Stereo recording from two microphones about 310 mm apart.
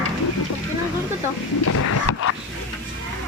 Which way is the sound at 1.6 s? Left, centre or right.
Left.